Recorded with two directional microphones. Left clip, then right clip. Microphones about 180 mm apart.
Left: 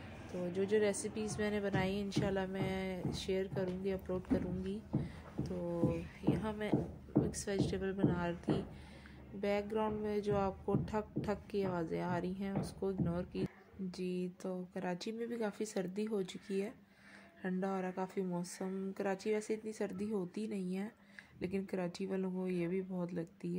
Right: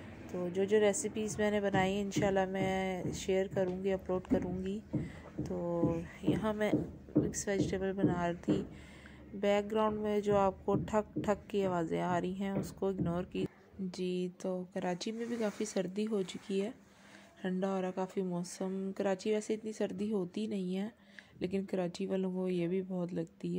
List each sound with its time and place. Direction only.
0.5 s a woman's voice: 15° right (ahead or behind)
7.2 s a woman's voice: 10° right (ahead or behind)